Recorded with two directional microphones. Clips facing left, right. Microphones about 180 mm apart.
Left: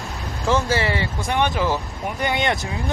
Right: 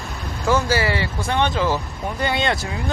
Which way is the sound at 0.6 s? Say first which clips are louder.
Right 1 dB; 20° left (ahead or behind).